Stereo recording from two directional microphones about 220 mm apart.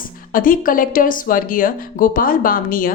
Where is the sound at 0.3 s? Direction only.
40° left (ahead or behind).